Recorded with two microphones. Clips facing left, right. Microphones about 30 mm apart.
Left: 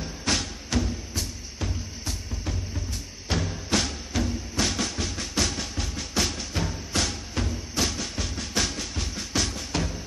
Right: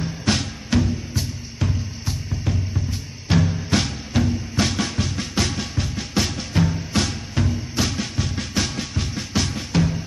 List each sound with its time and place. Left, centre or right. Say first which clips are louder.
0.0 s music: right 5 dB; centre